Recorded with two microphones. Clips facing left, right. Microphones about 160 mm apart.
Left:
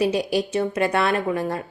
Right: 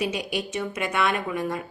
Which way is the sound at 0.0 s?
35° left (ahead or behind).